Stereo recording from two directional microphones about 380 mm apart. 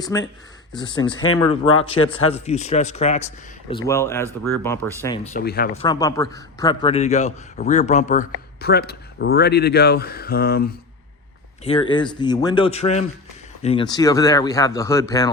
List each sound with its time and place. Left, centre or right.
0.1 s speech: centre
1.1 s speech: left
1.4 s speech: centre
5.3 s a man's voice: left
11.6 s speech: centre